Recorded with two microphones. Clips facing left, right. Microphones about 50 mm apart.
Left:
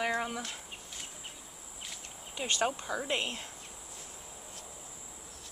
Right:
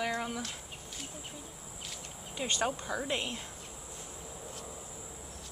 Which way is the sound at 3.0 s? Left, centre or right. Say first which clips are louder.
Left 1 dB; left.